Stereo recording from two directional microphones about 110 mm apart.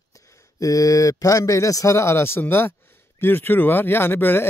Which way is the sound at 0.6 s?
30° left (ahead or behind).